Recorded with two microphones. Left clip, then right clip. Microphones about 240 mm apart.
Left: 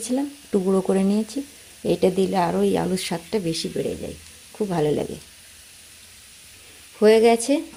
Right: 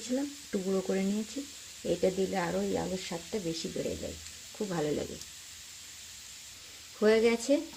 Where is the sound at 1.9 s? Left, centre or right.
Left.